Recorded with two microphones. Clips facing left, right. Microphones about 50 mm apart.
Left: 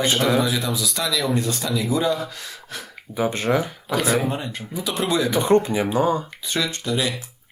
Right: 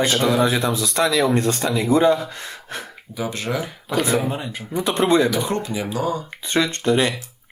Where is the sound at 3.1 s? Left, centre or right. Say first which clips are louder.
Left 4 dB; left.